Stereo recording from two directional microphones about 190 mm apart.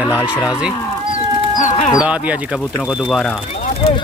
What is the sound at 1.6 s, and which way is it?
Speech, 40° left (ahead or behind).